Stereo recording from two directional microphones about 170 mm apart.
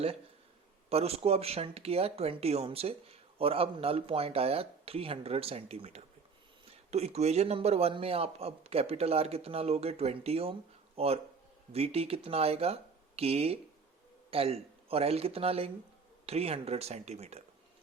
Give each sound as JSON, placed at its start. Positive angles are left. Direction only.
{"t": 0.9, "sound": "speech", "side_deg": -35}